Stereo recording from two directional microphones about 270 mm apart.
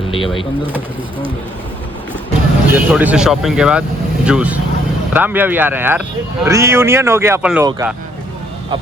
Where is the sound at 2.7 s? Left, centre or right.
Centre.